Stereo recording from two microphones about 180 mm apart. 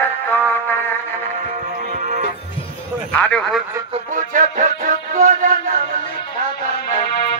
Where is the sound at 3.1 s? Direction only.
5° left (ahead or behind).